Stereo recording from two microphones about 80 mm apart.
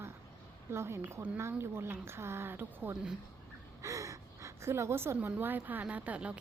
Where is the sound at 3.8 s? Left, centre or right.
Right.